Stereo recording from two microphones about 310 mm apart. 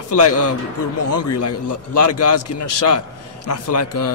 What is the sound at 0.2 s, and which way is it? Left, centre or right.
A man's voice, left.